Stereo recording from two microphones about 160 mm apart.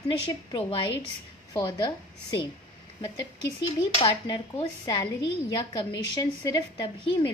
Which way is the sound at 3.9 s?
35° left (ahead or behind).